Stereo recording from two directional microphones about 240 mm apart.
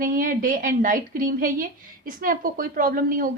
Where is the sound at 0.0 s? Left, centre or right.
Right.